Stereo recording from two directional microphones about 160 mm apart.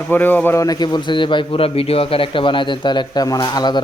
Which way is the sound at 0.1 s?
10° left (ahead or behind).